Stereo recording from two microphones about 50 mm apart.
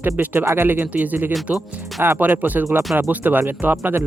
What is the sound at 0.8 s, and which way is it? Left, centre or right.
Speech, right.